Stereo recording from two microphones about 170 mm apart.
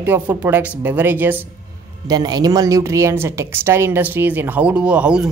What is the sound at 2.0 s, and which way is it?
A woman's voice, 25° right (ahead or behind).